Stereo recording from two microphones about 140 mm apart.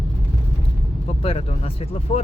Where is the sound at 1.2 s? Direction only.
45° left (ahead or behind).